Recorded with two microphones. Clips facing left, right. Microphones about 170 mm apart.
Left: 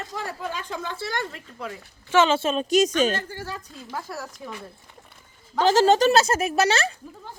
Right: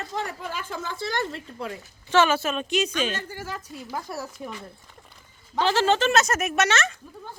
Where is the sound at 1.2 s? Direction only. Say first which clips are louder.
Right 2 dB; 30° right (ahead or behind).